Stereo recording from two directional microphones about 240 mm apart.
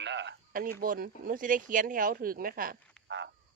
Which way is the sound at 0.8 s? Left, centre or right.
Right.